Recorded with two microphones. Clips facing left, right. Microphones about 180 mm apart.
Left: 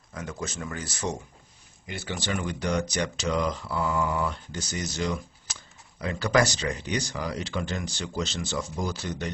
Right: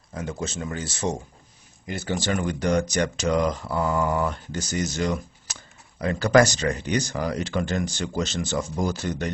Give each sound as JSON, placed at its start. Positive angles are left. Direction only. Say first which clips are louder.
{"t": 0.1, "sound": "speech", "louder": "right 4 dB", "side_deg": -30}
{"t": 1.9, "sound": "speech", "louder": "right 5 dB", "side_deg": -45}